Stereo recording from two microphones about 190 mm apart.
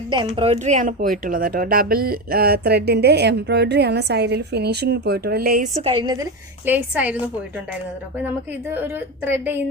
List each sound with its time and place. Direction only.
0.3 s speech: 30° right (ahead or behind); by 5.6 s 50° right (ahead or behind)
5.7 s a woman's voice: 30° right (ahead or behind)
6.7 s a woman's voice: 10° right (ahead or behind)
8.7 s a woman's voice: 10° right (ahead or behind)